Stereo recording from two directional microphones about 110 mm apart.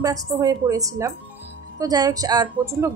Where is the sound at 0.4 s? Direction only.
30° right (ahead or behind).